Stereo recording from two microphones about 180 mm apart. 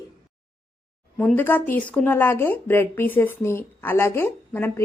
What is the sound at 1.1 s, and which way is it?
Speech, 10° left (ahead or behind).